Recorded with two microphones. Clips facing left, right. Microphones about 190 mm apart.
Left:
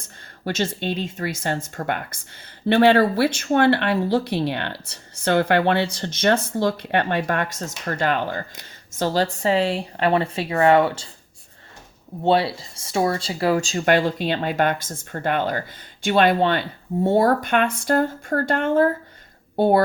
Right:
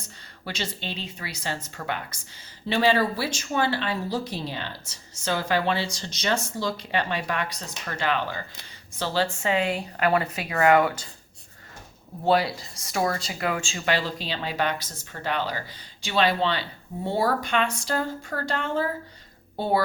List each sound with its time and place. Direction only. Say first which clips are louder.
0.0 s a woman's voice: left 8 dB; 50° left (ahead or behind); by 11.1 s 30° left (ahead or behind)
12.2 s a woman's voice: left 3 dB; 30° left (ahead or behind); by 19.8 s 55° left (ahead or behind)